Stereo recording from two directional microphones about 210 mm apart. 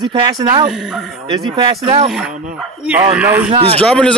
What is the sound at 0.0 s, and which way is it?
Speech, 20° right (ahead or behind).